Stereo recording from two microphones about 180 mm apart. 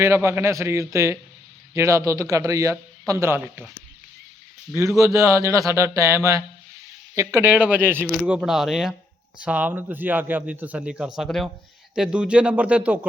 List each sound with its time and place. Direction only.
0.0 s speech: 15° right (ahead or behind)
4.7 s speech: 15° right (ahead or behind)